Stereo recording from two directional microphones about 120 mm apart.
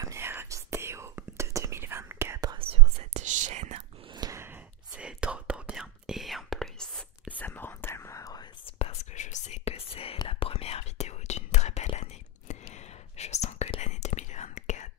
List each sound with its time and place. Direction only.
0.0 s whispering: 20° right (ahead or behind)
2.5 s whispering: 55° right (ahead or behind); by 3.7 s 85° right
4.1 s a sound: 35° right (ahead or behind)
4.9 s whispering: 10° right (ahead or behind); by 8.5 s 30° left (ahead or behind)
8.6 s whispering: 55° left (ahead or behind)
9.1 s whispering: 85° left